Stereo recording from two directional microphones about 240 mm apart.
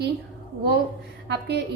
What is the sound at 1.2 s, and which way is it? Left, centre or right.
Speech, right.